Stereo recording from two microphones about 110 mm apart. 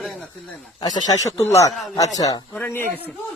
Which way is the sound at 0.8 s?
40° left (ahead or behind).